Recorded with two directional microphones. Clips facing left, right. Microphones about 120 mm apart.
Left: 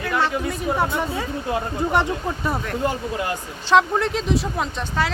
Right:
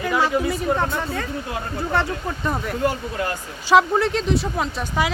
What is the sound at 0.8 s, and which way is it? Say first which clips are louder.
Speech: left 1 dB; 10° left (ahead or behind).